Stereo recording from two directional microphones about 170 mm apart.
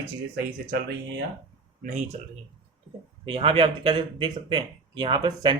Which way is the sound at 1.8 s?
50° right (ahead or behind).